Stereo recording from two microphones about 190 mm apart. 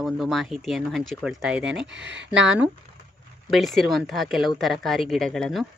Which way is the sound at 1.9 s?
70° right (ahead or behind).